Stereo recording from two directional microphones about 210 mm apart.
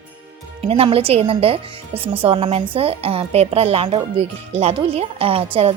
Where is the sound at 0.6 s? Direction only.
25° right (ahead or behind).